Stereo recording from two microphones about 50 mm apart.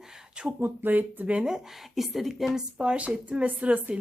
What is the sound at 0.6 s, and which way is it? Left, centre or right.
Speech, right.